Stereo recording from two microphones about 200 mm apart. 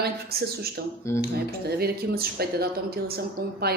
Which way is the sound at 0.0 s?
50° right (ahead or behind).